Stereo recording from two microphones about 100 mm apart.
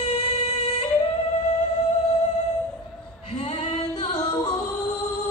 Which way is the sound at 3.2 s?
85° left.